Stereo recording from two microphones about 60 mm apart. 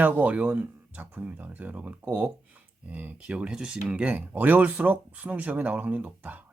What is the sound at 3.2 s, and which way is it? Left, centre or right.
Speech, centre.